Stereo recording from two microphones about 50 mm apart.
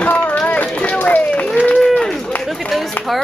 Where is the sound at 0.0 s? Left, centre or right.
Left.